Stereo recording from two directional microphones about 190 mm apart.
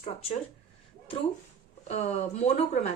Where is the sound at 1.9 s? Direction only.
35° left (ahead or behind).